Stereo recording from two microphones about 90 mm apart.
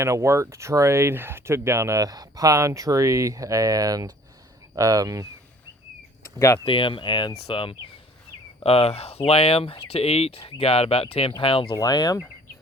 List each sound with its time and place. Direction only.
0.0 s speech: 30° right (ahead or behind)
6.2 s a sound: 35° left (ahead or behind)
6.7 s speech: 80° left
11.8 s speech: 45° left (ahead or behind)